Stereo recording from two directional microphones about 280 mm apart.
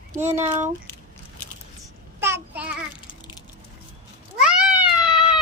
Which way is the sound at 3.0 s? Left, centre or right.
Centre.